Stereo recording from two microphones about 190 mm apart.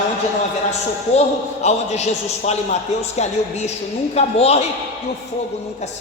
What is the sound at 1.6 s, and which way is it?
A woman's voice, 35° left (ahead or behind).